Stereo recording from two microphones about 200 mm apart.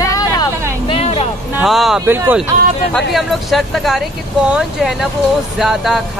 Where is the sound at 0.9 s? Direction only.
30° left (ahead or behind).